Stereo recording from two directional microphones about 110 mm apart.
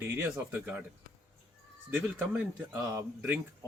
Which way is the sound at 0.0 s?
20° right (ahead or behind).